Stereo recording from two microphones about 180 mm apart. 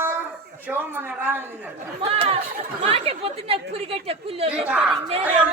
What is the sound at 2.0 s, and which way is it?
Speech, 30° right (ahead or behind).